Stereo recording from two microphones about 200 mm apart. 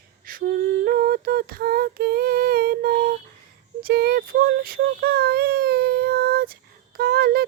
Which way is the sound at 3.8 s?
50° right (ahead or behind).